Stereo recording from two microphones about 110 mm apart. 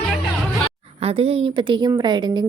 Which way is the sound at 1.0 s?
65° right (ahead or behind).